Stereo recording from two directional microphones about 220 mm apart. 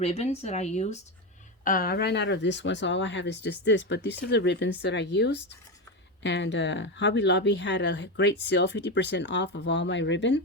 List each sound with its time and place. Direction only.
0.0 s speech: 30° left (ahead or behind)
1.6 s speech: 40° left (ahead or behind)